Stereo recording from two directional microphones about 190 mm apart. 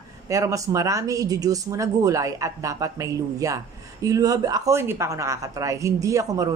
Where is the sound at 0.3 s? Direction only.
15° right (ahead or behind).